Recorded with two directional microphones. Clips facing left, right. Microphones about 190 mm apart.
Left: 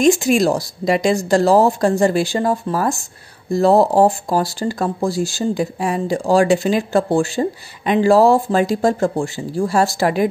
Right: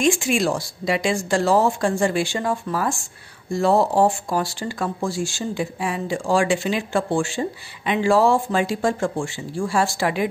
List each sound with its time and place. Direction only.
0.0 s speech: 40° left (ahead or behind)